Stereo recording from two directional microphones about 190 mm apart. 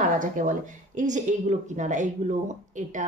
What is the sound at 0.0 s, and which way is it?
Speech, 45° right (ahead or behind).